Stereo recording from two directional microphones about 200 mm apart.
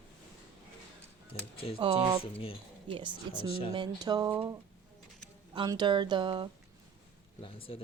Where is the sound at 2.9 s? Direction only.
25° right (ahead or behind).